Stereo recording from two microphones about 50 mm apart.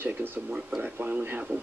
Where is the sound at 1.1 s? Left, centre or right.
Right.